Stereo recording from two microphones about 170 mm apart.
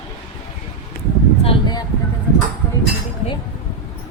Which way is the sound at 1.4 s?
30° left (ahead or behind).